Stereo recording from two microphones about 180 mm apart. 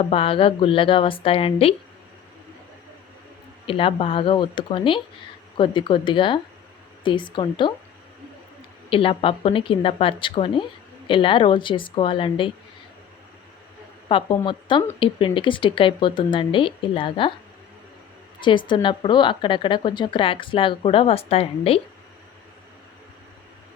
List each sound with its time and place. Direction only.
0.0 s a woman's voice: 30° left (ahead or behind)
3.7 s speech: 30° left (ahead or behind)
8.9 s speech: 30° left (ahead or behind)
14.1 s speech: 30° left (ahead or behind)
18.3 s speech: 25° left (ahead or behind)